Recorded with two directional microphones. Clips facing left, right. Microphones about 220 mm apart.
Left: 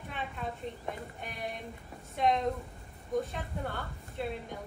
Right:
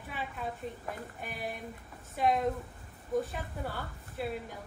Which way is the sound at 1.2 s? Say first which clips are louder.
Right 1 dB; 5° right (ahead or behind).